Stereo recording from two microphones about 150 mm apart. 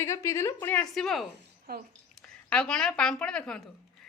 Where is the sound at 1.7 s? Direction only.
90° right.